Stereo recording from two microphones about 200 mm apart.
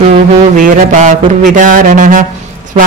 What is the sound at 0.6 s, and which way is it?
Mantra, 40° right (ahead or behind).